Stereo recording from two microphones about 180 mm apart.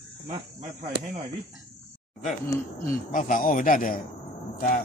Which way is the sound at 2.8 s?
50° left (ahead or behind).